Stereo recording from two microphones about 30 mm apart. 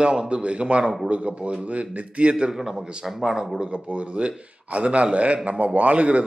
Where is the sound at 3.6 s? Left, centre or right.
Right.